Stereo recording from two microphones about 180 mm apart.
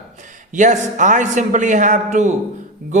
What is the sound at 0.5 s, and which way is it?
A man's voice, 45° right (ahead or behind).